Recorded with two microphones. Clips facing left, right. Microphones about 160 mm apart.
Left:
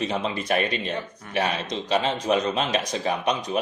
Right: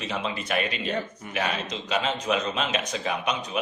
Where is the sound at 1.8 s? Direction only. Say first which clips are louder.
Left 4 dB; 35° left (ahead or behind).